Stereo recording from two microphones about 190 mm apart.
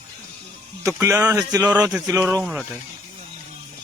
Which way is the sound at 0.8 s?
15° right (ahead or behind).